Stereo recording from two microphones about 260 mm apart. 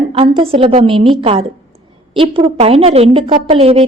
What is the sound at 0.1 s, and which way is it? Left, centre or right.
A woman's voice, right.